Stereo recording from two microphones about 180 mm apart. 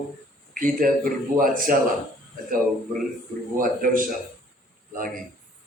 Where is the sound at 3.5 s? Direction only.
50° right (ahead or behind).